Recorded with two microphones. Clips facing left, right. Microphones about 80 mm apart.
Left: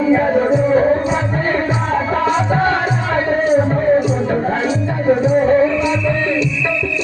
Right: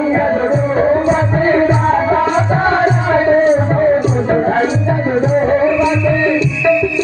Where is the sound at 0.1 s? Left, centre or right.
Right.